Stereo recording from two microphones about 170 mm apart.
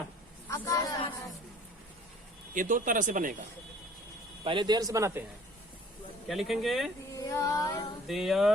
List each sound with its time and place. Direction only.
0.5 s a sound: 20° left (ahead or behind)
2.6 s speech: 50° right (ahead or behind)
4.4 s speech: 25° right (ahead or behind)
6.2 s speech: centre (ahead or behind)
7.1 s female singing: 20° left (ahead or behind)
8.0 s speech: centre (ahead or behind)